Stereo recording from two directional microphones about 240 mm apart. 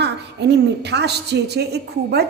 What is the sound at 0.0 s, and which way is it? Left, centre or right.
A woman's voice, right.